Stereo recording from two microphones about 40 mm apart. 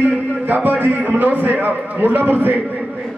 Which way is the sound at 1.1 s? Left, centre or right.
Right.